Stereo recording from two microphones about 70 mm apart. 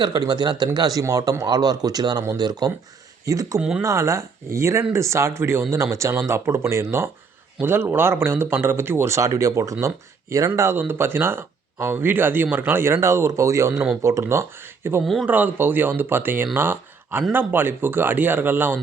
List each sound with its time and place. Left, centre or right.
0.0 s speech: right
1.1 s speech: right
1.5 s speech: right
3.2 s speech: right
3.6 s speech: centre
3.8 s speech: right
10.8 s speech: right
15.0 s speech: centre
15.3 s speech: right